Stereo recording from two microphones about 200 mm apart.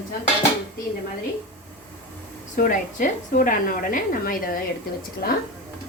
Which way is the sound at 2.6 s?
45° left (ahead or behind).